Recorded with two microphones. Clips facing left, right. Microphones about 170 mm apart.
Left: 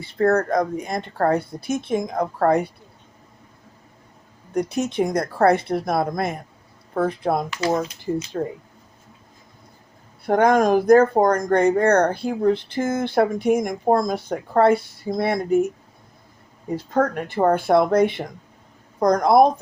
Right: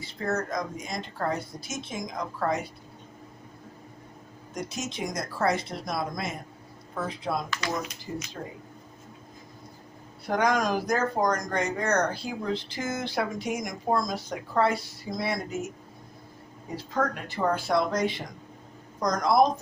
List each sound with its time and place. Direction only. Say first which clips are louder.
0.0 s speech: left 11 dB; 60° left (ahead or behind)
4.5 s speech: left 12 dB; 60° left (ahead or behind)
10.2 s speech: left 8 dB; 55° left (ahead or behind)
16.7 s speech: left 8 dB; 50° left (ahead or behind)